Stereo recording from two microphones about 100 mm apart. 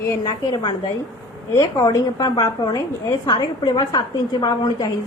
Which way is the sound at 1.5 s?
35° left (ahead or behind).